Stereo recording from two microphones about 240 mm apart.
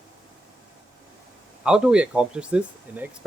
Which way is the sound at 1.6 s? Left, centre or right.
Centre.